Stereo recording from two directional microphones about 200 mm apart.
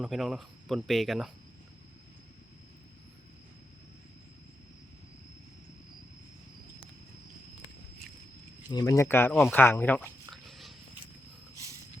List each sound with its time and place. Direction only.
0.0 s speech: centre (ahead or behind)
8.7 s speech: 15° left (ahead or behind)
10.4 s a sound: centre (ahead or behind)